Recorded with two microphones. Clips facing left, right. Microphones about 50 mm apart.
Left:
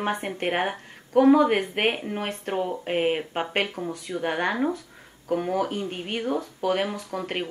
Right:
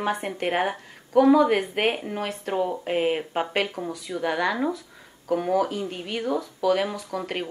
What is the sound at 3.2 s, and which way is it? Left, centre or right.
Speech, centre.